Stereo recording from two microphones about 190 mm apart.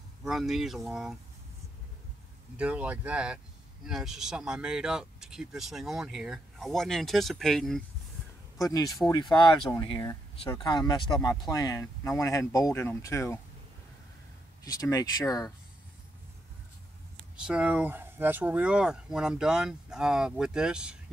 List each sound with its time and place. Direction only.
0.2 s speech: centre (ahead or behind)
2.5 s speech: 5° right (ahead or behind)
8.5 s speech: 20° left (ahead or behind)
14.6 s speech: 20° left (ahead or behind)
17.4 s speech: 5° right (ahead or behind)